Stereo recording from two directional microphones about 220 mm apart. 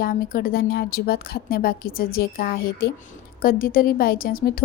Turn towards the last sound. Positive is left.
turn(degrees=40)  # may be behind; listen again after turning